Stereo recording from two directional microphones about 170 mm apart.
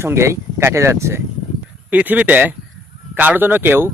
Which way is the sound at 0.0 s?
15° right (ahead or behind).